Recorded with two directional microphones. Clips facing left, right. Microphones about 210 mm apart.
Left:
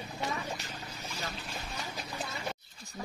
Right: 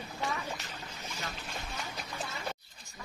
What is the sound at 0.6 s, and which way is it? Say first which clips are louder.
Boat: left 1 dB; 40° left (ahead or behind).